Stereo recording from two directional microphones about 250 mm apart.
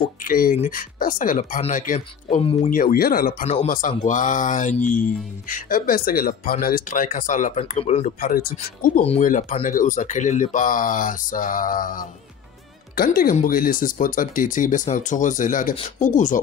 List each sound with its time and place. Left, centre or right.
0.2 s speech: left